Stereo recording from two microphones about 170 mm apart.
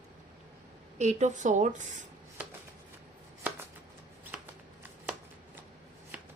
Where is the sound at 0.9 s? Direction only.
45° right (ahead or behind).